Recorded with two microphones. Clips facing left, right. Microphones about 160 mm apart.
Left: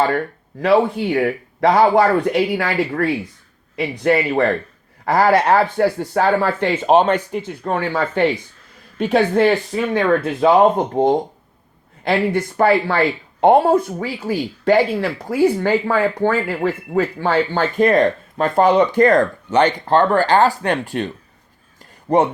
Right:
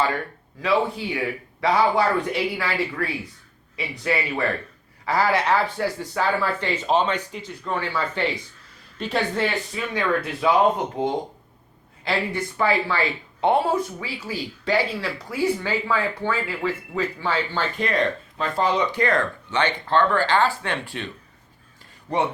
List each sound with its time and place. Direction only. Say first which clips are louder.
0.6 s speech: left 7 dB; 55° left (ahead or behind)
22.1 s speech: left 8 dB; 50° left (ahead or behind)